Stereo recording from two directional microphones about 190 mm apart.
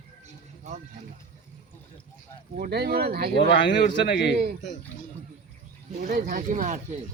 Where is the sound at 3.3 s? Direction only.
65° left (ahead or behind).